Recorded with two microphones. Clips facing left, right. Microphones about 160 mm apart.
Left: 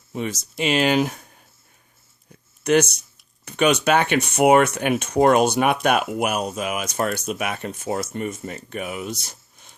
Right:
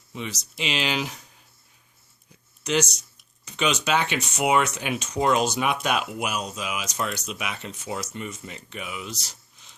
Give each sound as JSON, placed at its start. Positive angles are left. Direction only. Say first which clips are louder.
{"t": 0.1, "sound": "speech", "louder": "left 7 dB", "side_deg": 50}
{"t": 2.6, "sound": "speech", "louder": "left 7 dB", "side_deg": 55}